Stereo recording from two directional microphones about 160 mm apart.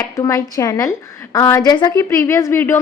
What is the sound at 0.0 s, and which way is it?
A woman's voice, 20° left (ahead or behind).